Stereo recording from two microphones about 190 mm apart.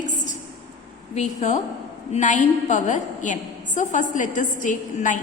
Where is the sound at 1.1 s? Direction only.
35° left (ahead or behind).